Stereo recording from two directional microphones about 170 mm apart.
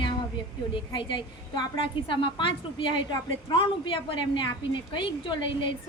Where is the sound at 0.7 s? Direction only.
30° left (ahead or behind).